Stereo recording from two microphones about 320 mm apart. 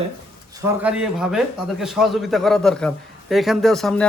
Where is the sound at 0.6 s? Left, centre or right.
Centre.